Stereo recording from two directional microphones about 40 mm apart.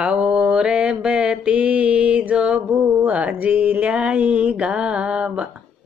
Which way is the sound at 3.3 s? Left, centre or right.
Right.